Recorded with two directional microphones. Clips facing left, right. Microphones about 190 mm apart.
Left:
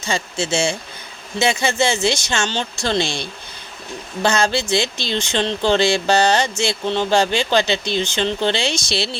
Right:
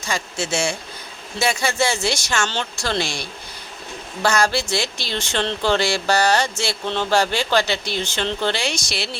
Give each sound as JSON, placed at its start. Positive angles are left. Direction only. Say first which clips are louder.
{"t": 0.0, "sound": "speech", "louder": "left 3 dB", "side_deg": 25}